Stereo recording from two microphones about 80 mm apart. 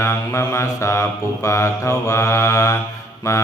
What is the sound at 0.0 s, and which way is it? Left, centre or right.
Mantra, left.